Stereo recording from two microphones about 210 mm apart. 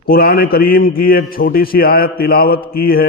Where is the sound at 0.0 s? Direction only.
45° left (ahead or behind).